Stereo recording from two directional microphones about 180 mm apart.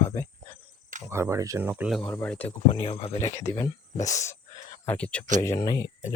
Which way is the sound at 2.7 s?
30° left (ahead or behind).